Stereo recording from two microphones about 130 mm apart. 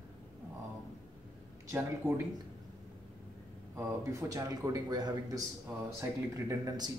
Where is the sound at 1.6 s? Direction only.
20° right (ahead or behind).